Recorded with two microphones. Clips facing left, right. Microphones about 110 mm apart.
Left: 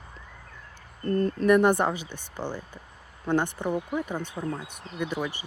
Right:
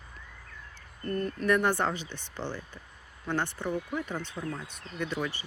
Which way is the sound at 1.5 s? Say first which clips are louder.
Left 6 dB; 15° left (ahead or behind).